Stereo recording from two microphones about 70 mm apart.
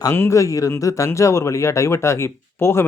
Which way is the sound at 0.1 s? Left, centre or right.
Left.